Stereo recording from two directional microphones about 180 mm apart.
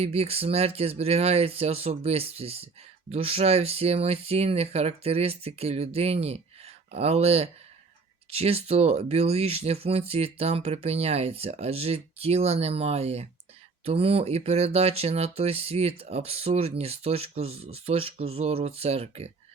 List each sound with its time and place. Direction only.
0.0 s speech: 35° right (ahead or behind)